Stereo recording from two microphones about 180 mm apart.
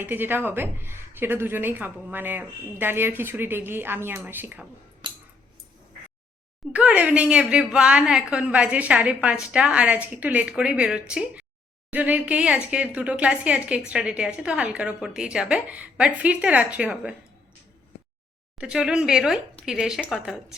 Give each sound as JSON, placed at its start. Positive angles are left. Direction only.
{"t": 0.0, "sound": "a woman's voice", "side_deg": -10}
{"t": 5.0, "sound": "a sound", "side_deg": -25}
{"t": 6.7, "sound": "a woman's voice", "side_deg": -5}
{"t": 18.6, "sound": "speech", "side_deg": -5}